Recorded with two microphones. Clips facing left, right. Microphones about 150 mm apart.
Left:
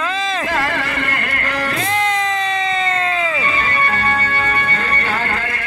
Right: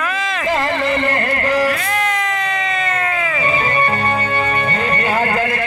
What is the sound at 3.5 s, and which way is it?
Music, 45° right (ahead or behind).